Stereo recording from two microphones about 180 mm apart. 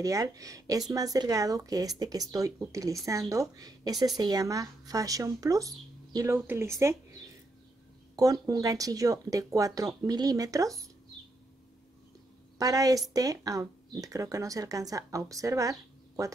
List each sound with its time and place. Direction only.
0.0 s speech: 20° right (ahead or behind)
8.2 s speech: 20° right (ahead or behind)
12.5 s speech: 20° right (ahead or behind)